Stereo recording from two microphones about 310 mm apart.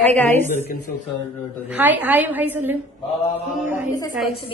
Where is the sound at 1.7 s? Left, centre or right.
Centre.